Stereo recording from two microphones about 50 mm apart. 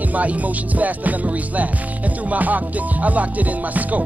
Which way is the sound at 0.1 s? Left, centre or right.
Right.